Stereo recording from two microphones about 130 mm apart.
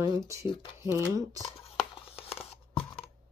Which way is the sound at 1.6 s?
45° left (ahead or behind).